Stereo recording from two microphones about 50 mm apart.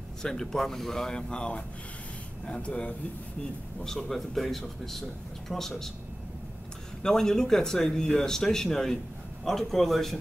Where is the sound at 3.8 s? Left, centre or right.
Centre.